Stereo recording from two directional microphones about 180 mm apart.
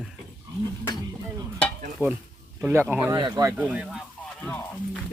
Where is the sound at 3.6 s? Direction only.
5° right (ahead or behind).